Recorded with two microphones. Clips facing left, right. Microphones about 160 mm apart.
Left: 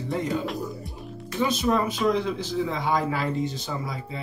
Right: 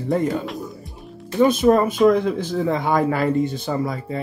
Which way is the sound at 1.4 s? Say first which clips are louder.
Right 8 dB; 50° right (ahead or behind).